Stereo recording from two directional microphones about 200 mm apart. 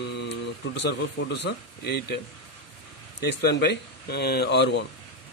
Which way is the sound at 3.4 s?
55° left (ahead or behind).